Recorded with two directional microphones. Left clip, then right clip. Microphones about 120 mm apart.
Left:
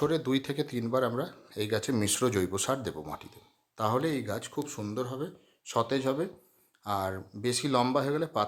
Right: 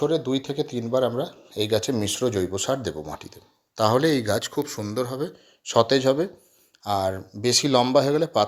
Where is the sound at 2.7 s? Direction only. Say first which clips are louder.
Right 6 dB; 20° right (ahead or behind).